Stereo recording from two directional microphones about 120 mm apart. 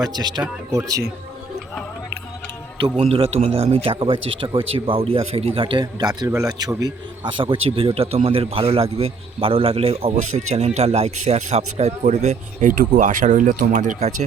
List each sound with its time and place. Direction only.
0.0 s speech: 35° right (ahead or behind)
3.0 s speech: 55° right (ahead or behind); by 6.9 s 30° right (ahead or behind)
7.3 s a man's voice: 45° right (ahead or behind); by 14.3 s 90° right